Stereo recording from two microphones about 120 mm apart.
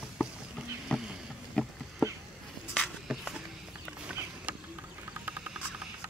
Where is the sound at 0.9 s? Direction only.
5° left (ahead or behind).